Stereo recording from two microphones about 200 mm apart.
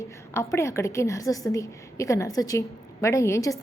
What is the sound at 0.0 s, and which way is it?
A woman's voice, 15° left (ahead or behind).